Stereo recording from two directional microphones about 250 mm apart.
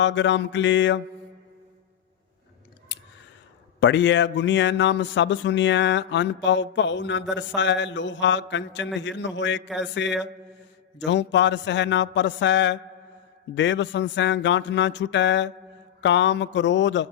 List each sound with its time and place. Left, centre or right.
0.0 s speech: left
2.9 s a sound: left
3.8 s speech: left